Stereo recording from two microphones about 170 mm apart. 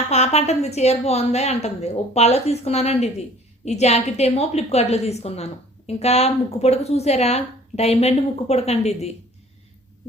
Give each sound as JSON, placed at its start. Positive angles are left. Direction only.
{"t": 0.1, "sound": "a woman's voice", "side_deg": 40}